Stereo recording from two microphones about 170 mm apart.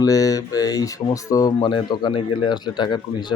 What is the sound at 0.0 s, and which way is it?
Speech, 20° left (ahead or behind).